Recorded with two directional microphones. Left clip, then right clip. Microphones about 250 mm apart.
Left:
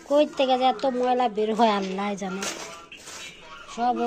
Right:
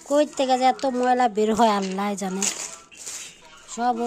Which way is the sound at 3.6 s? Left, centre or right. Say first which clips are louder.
Right 1 dB; right.